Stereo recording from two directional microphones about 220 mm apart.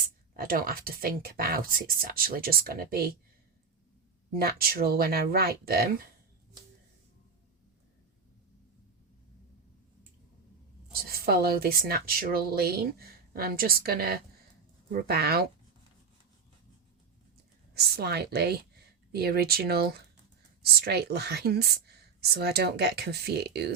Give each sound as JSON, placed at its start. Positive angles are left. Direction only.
{"t": 0.3, "sound": "speech", "side_deg": -40}
{"t": 4.3, "sound": "speech", "side_deg": -45}
{"t": 11.1, "sound": "speech", "side_deg": -45}
{"t": 17.7, "sound": "speech", "side_deg": -45}